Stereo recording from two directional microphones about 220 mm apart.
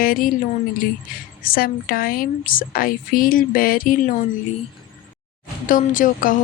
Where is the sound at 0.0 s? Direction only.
40° left (ahead or behind).